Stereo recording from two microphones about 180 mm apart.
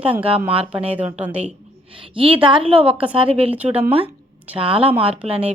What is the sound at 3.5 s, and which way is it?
Speech, 10° right (ahead or behind).